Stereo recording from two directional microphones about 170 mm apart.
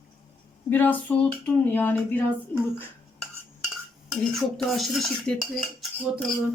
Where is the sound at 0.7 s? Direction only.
10° left (ahead or behind).